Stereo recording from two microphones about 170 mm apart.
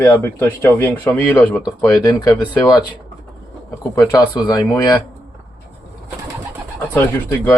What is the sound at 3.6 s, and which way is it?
Speech, 20° left (ahead or behind).